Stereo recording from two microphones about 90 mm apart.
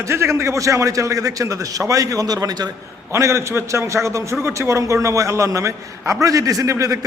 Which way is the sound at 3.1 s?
30° right (ahead or behind).